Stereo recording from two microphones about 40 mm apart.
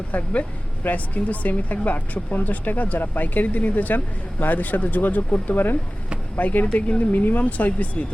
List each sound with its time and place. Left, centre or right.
0.1 s speech: left